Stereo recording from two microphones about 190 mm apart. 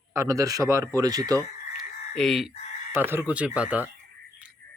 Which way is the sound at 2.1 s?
Centre (ahead or behind).